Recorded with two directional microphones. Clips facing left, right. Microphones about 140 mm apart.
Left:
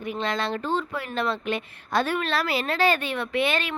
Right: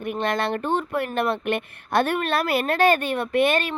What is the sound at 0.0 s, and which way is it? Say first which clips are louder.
Speech: right 3 dB; 55° right (ahead or behind).